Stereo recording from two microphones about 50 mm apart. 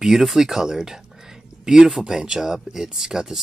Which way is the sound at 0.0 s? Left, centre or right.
Centre.